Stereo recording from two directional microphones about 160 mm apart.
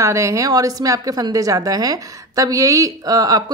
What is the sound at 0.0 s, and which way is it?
A woman's voice, 20° right (ahead or behind).